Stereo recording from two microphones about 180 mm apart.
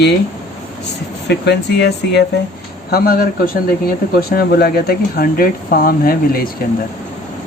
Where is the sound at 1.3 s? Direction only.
70° left (ahead or behind).